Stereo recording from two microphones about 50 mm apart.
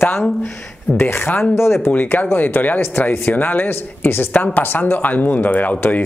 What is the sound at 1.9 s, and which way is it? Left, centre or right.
Speech, left.